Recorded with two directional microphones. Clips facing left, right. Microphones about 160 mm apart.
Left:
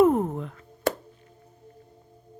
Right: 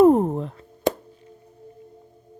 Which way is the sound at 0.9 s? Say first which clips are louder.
Right 3 dB; 15° right (ahead or behind).